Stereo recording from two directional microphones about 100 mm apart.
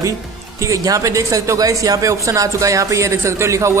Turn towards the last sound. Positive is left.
turn(degrees=-30)  # may be behind; listen again after turning